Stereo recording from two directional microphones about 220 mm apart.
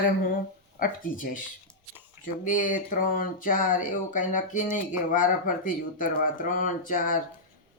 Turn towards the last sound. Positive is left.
turn(degrees=40)  # may be behind; listen again after turning